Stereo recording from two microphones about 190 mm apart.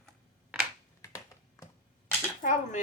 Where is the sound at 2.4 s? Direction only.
40° left (ahead or behind).